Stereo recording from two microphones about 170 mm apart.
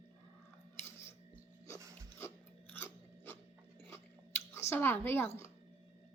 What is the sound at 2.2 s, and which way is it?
Biting, 15° left (ahead or behind).